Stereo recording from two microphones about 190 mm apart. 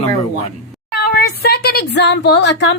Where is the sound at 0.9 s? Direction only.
55° left (ahead or behind).